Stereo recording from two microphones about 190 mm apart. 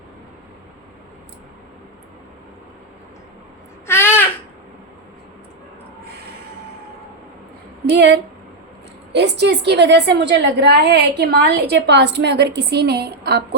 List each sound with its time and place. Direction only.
3.8 s babbling: 10° left (ahead or behind)
7.9 s a woman's voice: 65° right (ahead or behind)